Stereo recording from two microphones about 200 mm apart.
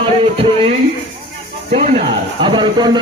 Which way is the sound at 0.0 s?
25° right (ahead or behind).